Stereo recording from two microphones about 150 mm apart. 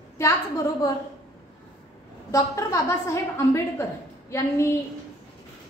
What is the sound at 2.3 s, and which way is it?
A woman's voice, 20° left (ahead or behind).